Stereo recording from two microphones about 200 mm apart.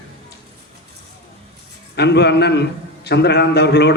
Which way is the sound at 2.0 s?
55° left (ahead or behind).